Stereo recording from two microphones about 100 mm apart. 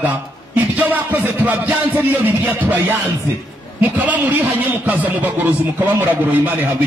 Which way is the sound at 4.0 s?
15° right (ahead or behind).